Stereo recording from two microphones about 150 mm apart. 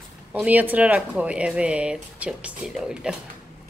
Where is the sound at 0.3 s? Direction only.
10° right (ahead or behind).